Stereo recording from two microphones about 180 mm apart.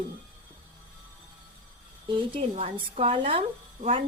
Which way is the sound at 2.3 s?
30° right (ahead or behind).